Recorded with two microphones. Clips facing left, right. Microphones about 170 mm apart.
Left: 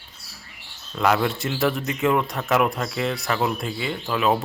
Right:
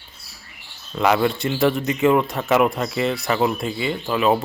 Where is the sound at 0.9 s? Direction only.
Centre (ahead or behind).